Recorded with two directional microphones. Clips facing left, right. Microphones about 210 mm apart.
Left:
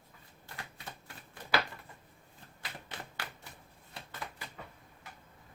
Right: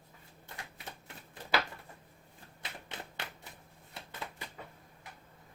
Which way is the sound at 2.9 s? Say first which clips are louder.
Right 1 dB; 20° right (ahead or behind).